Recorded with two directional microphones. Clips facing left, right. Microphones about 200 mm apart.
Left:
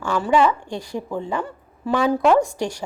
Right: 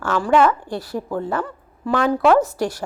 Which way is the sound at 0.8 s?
15° left (ahead or behind).